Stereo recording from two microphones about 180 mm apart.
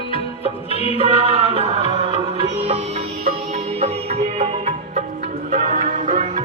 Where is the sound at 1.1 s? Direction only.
30° right (ahead or behind).